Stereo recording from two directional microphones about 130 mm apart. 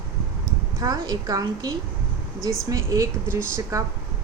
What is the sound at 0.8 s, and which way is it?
A woman's voice, 30° right (ahead or behind).